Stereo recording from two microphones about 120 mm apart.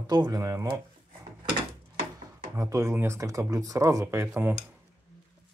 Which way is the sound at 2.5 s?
25° right (ahead or behind).